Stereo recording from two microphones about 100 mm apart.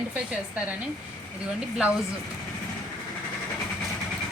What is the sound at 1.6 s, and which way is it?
Speech, 10° right (ahead or behind).